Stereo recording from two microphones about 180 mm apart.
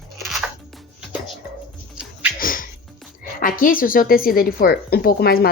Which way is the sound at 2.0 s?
5° right (ahead or behind).